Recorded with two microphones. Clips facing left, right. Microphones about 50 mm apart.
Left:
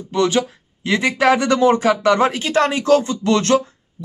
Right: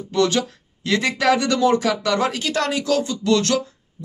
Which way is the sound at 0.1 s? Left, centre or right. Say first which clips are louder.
Left 2 dB; left.